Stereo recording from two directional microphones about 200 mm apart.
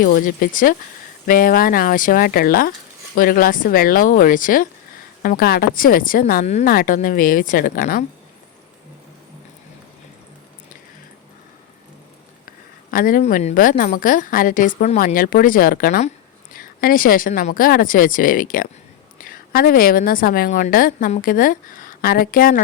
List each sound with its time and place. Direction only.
0.0 s a woman's voice: 45° left (ahead or behind)
6.7 s a woman's voice: 45° left (ahead or behind)
12.5 s a woman's voice: 45° left (ahead or behind)